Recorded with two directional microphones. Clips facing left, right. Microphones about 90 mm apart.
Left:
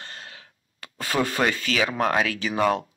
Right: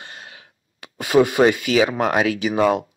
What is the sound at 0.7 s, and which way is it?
Speech, 15° right (ahead or behind).